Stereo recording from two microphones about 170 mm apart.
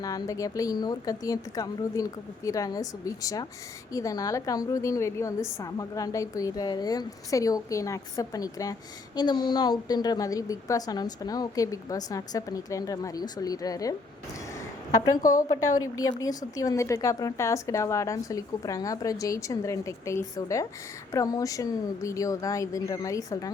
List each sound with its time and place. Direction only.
0.0 s a woman's voice: 20° left (ahead or behind)
15.1 s a woman's voice: 50° left (ahead or behind)
16.2 s a woman's voice: 20° left (ahead or behind)